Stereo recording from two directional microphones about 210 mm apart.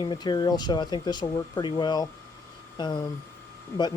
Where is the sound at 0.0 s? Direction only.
20° left (ahead or behind).